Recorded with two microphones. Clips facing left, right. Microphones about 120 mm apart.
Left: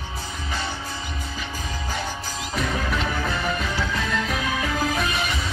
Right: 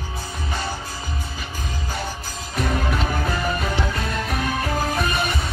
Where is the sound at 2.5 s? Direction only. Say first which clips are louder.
Right 2 dB; 45° right (ahead or behind).